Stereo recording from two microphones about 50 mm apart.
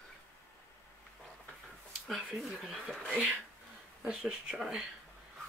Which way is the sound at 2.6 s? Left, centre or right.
Centre.